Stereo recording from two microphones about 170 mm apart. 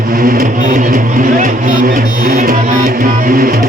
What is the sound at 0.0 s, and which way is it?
Speech, 55° right (ahead or behind).